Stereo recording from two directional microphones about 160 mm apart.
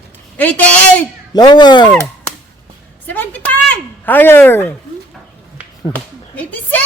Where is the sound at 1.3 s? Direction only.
25° left (ahead or behind).